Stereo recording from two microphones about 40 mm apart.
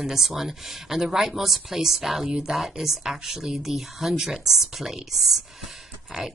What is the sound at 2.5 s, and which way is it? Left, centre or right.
Speech, centre.